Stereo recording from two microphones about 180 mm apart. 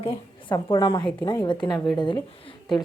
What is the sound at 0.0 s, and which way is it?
A woman's voice, 30° left (ahead or behind).